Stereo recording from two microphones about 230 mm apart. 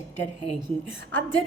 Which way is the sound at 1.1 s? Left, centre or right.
Left.